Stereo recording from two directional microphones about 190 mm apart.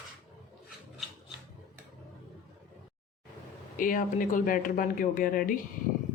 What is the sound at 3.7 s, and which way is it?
Speech, 45° left (ahead or behind).